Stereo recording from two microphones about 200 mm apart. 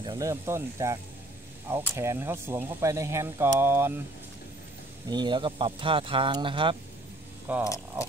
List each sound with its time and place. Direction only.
0.0 s speech: 15° right (ahead or behind)
5.0 s speech: 20° right (ahead or behind)
7.5 s speech: 10° right (ahead or behind)